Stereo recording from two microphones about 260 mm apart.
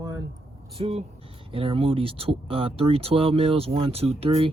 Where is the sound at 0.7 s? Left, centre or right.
Right.